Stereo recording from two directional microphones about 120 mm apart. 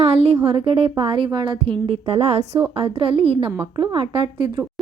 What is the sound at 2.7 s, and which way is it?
A woman's voice, 50° right (ahead or behind).